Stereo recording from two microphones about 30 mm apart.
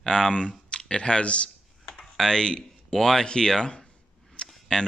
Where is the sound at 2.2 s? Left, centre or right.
Left.